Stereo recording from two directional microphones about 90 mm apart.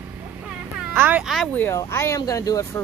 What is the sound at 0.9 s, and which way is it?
Speech, 20° right (ahead or behind).